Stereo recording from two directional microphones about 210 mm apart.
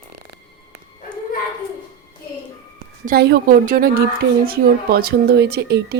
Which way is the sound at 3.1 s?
50° right (ahead or behind).